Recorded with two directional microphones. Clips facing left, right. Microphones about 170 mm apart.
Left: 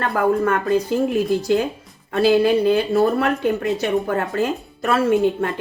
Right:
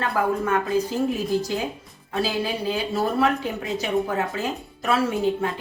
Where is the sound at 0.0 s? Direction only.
55° left (ahead or behind).